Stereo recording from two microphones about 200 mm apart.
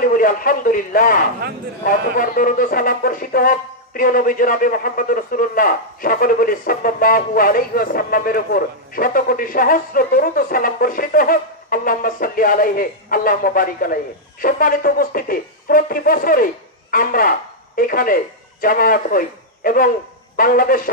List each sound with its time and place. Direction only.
0.0 s speech: 45° left (ahead or behind)